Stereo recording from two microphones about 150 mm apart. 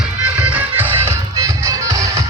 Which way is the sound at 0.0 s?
10° right (ahead or behind).